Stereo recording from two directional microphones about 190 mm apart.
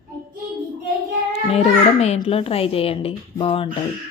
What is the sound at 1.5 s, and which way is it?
A woman's voice, 35° left (ahead or behind).